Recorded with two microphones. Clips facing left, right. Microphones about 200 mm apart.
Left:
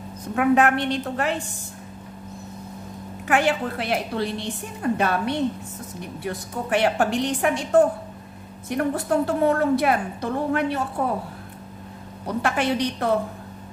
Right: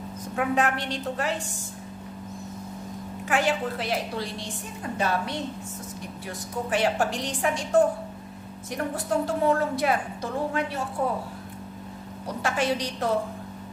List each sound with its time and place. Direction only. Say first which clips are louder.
0.4 s a woman's voice: left 6 dB; 65° left (ahead or behind)
3.3 s a woman's voice: left 3 dB; 60° left (ahead or behind)
12.4 s a woman's voice: left 3 dB; 60° left (ahead or behind)